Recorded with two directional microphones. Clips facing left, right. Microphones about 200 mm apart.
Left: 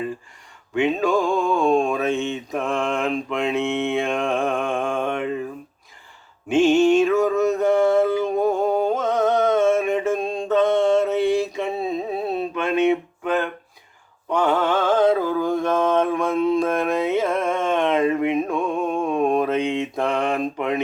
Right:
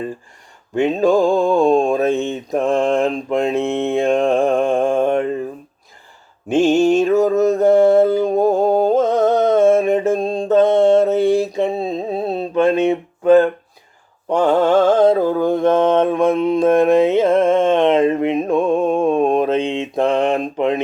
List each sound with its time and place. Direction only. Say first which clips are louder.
0.7 s music: right 5 dB; 35° right (ahead or behind)
6.5 s mantra: right 2 dB; 40° right (ahead or behind)
14.9 s mantra: right 5 dB; 30° right (ahead or behind)